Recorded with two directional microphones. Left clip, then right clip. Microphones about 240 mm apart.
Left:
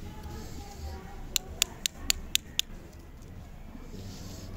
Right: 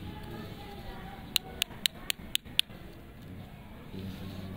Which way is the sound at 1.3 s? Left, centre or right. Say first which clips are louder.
Left 1 dB; centre.